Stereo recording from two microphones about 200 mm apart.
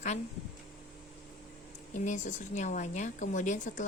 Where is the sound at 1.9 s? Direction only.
40° left (ahead or behind).